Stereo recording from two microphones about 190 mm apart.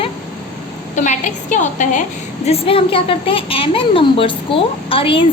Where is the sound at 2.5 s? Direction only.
30° left (ahead or behind).